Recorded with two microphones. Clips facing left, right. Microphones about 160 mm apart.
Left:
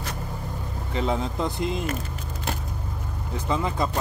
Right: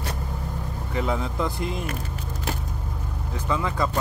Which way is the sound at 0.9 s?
20° left (ahead or behind).